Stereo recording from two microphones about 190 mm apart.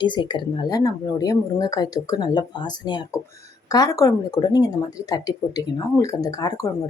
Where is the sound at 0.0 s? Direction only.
25° left (ahead or behind).